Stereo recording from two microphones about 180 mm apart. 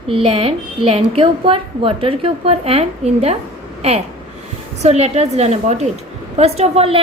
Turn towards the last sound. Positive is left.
turn(degrees=-35)  # may be behind; listen again after turning